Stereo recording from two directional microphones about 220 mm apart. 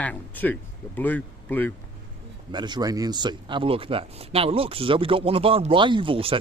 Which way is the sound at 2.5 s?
20° right (ahead or behind).